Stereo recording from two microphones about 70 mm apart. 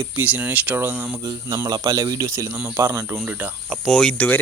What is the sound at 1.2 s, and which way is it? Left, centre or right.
Speech, right.